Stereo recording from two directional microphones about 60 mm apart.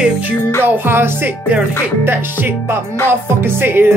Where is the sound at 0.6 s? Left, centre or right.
Right.